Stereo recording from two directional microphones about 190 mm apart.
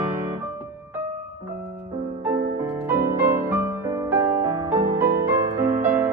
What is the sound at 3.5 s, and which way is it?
Music, 15° right (ahead or behind).